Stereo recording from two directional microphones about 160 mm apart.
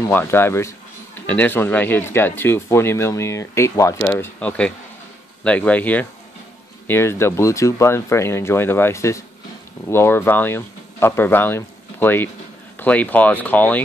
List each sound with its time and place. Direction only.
0.1 s speech: 15° left (ahead or behind)